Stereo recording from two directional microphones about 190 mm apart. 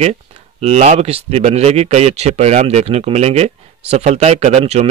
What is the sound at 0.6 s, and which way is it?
Speech, 35° right (ahead or behind).